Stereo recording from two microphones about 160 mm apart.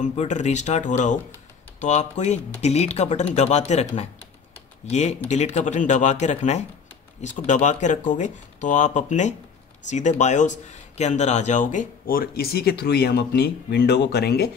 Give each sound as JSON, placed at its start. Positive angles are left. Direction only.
{"t": 0.0, "sound": "speech", "side_deg": 50}
{"t": 4.8, "sound": "speech", "side_deg": 45}